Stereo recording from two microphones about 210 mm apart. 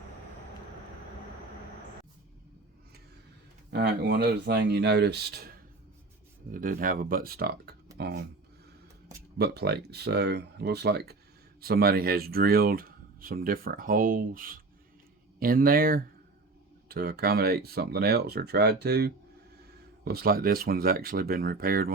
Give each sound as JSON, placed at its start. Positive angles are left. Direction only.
{"t": 3.7, "sound": "speech", "side_deg": -55}
{"t": 6.5, "sound": "speech", "side_deg": -40}
{"t": 9.4, "sound": "speech", "side_deg": -50}